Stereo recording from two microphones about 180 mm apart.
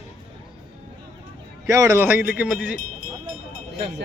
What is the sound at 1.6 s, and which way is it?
A man's voice, 20° right (ahead or behind).